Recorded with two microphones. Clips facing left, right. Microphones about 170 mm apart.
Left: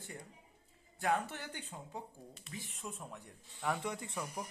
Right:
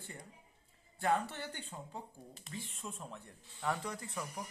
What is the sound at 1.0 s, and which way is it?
Speech, 10° left (ahead or behind).